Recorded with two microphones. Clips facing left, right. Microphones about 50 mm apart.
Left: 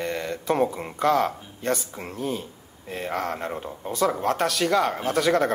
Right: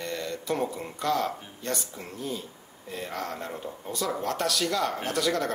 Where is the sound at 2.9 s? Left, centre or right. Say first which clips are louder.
Left 6 dB; left.